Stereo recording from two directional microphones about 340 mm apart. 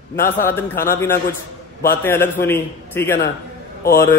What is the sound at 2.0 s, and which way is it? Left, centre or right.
A man's voice, centre.